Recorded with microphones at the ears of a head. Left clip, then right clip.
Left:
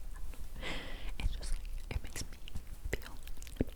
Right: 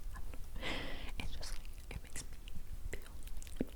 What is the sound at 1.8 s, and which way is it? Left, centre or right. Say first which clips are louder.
Whispering: left 6 dB; left.